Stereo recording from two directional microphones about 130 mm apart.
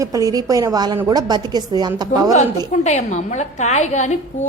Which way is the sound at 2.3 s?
65° left (ahead or behind).